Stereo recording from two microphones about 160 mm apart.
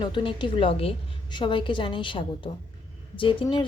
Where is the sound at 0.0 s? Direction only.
30° left (ahead or behind).